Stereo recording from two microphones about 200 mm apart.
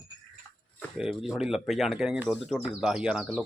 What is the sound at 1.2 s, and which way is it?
Speech, centre (ahead or behind).